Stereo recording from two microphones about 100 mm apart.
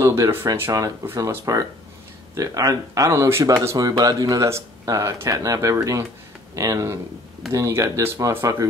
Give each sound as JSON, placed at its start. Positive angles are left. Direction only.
{"t": 0.0, "sound": "speech", "side_deg": -25}
{"t": 3.7, "sound": "speech", "side_deg": -40}